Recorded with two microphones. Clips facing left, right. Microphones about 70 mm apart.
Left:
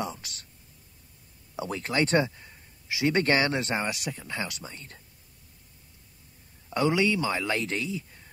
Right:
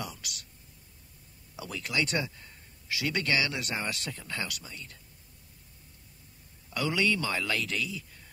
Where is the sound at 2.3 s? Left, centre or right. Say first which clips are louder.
Left 2 dB; centre; by 5.0 s left.